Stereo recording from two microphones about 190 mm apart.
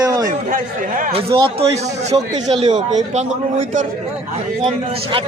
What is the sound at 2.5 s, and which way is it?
Speech, 30° right (ahead or behind).